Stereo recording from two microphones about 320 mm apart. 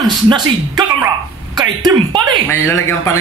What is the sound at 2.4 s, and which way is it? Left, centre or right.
Speech, centre.